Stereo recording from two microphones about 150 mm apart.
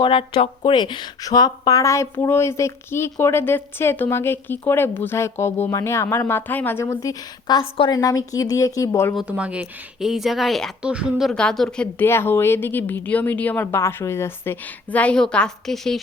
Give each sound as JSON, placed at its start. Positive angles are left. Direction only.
{"t": 0.0, "sound": "speech", "side_deg": 35}
{"t": 9.1, "sound": "speech", "side_deg": -10}